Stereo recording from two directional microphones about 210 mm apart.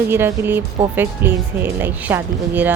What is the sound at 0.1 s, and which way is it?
Speech, 10° right (ahead or behind).